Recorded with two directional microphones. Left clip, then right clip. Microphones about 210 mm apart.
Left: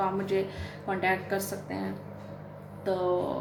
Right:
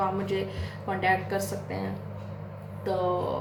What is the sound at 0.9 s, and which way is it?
Speech, 30° left (ahead or behind).